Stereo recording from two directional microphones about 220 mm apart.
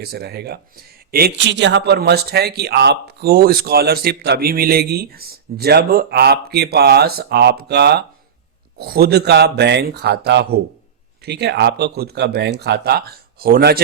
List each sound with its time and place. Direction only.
0.0 s speech: 45° right (ahead or behind)